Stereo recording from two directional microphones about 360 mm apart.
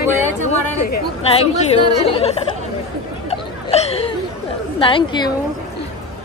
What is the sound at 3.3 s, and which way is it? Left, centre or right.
Chatter, centre.